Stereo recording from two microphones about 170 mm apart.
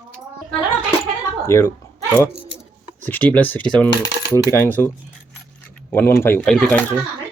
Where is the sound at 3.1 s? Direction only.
10° left (ahead or behind).